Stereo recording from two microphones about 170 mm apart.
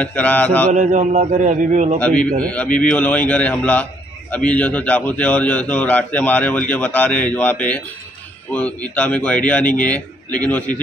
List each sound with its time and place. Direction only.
0.0 s a man's voice: 10° left (ahead or behind)
0.7 s a man's voice: 45° right (ahead or behind)
2.0 s a man's voice: 5° left (ahead or behind)